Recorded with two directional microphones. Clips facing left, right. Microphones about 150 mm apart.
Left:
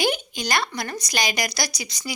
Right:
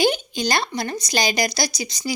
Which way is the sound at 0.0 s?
30° right (ahead or behind).